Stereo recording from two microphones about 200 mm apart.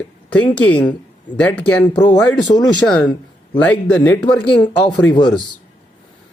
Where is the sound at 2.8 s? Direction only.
5° left (ahead or behind).